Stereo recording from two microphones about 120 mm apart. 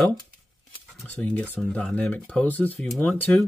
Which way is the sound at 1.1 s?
15° left (ahead or behind).